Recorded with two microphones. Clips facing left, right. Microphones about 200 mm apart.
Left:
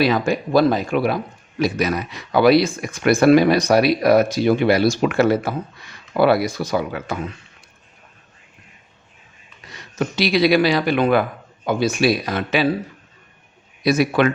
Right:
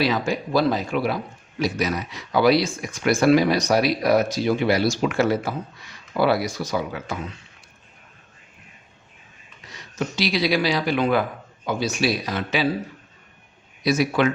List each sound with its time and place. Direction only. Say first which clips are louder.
0.0 s speech: left 4 dB; 55° left (ahead or behind)
10.2 s speech: left 6 dB; 60° left (ahead or behind)
13.8 s speech: left 3 dB; 60° left (ahead or behind)